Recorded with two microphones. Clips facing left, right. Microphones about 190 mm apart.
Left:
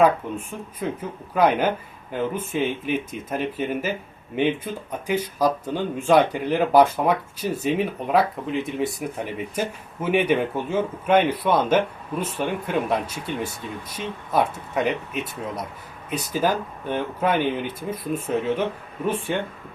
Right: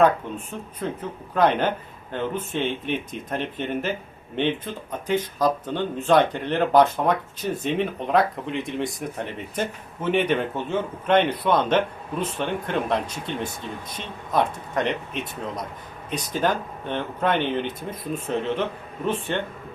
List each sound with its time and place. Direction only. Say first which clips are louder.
0.0 s speech: left 1 dB; 10° left (ahead or behind)